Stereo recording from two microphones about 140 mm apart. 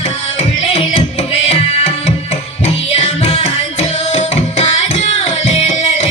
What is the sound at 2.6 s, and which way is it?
Music, 50° left (ahead or behind).